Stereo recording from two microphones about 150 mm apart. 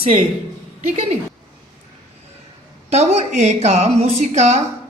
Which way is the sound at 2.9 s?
45° right (ahead or behind).